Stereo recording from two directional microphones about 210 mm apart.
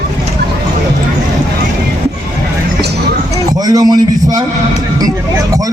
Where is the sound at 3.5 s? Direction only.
20° right (ahead or behind).